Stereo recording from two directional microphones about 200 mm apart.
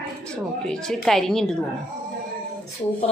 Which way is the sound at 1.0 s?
Centre (ahead or behind).